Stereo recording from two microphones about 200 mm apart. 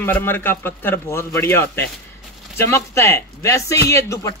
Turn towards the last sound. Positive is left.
turn(degrees=15)  # may be behind; listen again after turning